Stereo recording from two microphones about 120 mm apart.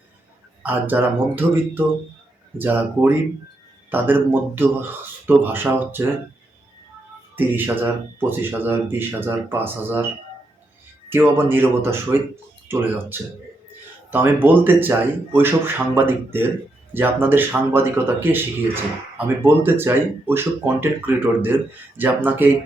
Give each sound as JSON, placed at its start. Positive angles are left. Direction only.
{"t": 0.6, "sound": "speech", "side_deg": -15}
{"t": 7.3, "sound": "speech", "side_deg": -15}
{"t": 11.1, "sound": "speech", "side_deg": -20}